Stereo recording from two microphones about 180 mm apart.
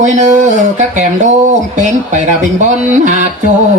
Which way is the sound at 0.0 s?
40° right (ahead or behind).